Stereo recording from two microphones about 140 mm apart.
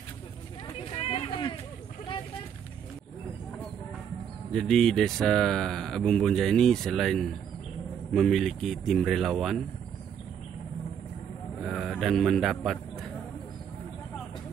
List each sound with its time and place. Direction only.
1.0 s a sound: 40° left (ahead or behind)
4.5 s speech: 5° left (ahead or behind)
11.6 s a man's voice: centre (ahead or behind)